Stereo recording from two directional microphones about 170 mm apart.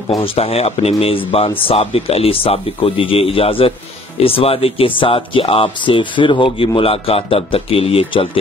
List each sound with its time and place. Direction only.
0.1 s speech: 35° left (ahead or behind)